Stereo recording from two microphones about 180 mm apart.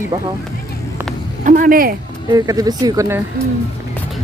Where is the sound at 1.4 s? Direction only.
50° right (ahead or behind).